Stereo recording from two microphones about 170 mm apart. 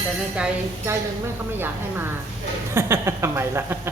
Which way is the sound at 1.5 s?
10° right (ahead or behind).